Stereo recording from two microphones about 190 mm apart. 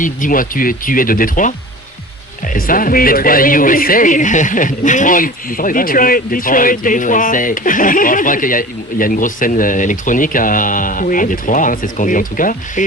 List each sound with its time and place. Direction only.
0.0 s speech: 45° left (ahead or behind)